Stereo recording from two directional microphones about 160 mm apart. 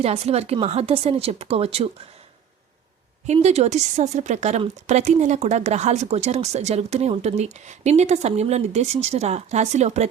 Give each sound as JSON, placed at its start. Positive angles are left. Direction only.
{"t": 0.0, "sound": "a woman's voice", "side_deg": -40}
{"t": 3.2, "sound": "speech", "side_deg": -45}